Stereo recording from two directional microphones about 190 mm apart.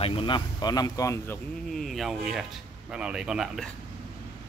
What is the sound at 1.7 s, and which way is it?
A man's voice, centre (ahead or behind).